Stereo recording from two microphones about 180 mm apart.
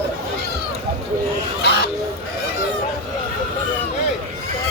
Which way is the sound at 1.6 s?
65° left (ahead or behind).